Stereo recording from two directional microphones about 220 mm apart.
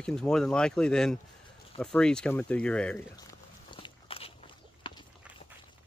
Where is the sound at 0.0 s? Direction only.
5° left (ahead or behind).